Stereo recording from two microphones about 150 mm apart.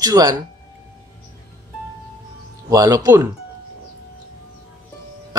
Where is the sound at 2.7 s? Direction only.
25° right (ahead or behind).